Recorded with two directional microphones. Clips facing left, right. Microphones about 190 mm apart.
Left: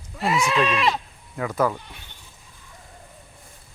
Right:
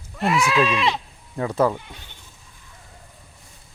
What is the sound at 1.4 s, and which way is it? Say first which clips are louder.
Speech: right 3 dB; 30° right (ahead or behind).